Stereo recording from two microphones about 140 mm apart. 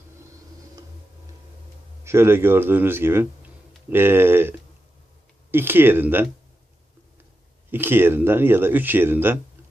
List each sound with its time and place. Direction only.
2.0 s speech: 20° right (ahead or behind)
7.7 s speech: 15° right (ahead or behind)